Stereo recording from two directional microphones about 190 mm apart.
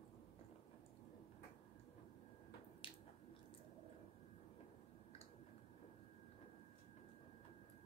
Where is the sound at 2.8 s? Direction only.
30° left (ahead or behind).